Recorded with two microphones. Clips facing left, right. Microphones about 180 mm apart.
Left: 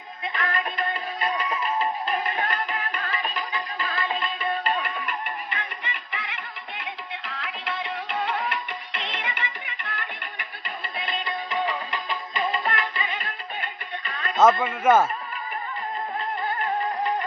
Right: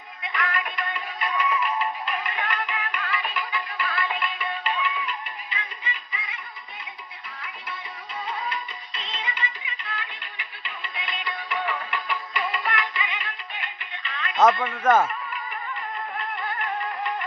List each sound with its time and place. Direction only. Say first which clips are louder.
0.3 s music: left 1 dB; 30° left (ahead or behind); by 6.2 s 65° left (ahead or behind)
6.7 s music: left 10 dB; 85° left; by 10.4 s 55° left (ahead or behind)
10.9 s music: left 4 dB; 35° left (ahead or behind)
14.3 s a man's voice: left 1 dB; 5° left (ahead or behind)